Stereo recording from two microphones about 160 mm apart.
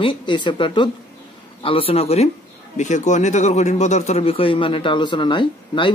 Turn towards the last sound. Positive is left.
turn(degrees=30)  # may be behind; listen again after turning